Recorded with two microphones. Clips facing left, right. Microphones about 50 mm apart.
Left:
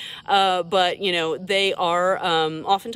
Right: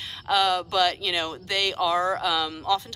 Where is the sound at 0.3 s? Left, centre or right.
Centre.